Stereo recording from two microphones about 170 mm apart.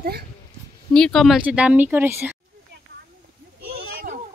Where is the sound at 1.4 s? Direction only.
10° right (ahead or behind).